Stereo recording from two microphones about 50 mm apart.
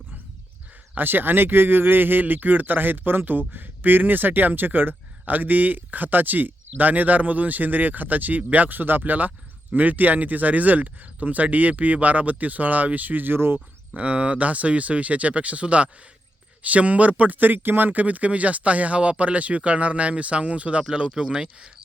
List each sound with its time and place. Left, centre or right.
0.9 s speech: right
13.9 s speech: right